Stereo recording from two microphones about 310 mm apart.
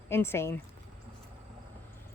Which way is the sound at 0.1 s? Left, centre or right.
Centre.